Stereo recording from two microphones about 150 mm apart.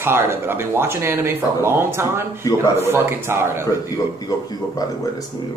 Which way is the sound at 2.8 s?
15° right (ahead or behind).